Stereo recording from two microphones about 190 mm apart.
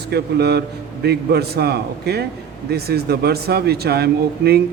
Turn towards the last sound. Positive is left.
turn(degrees=-55)  # may be behind; listen again after turning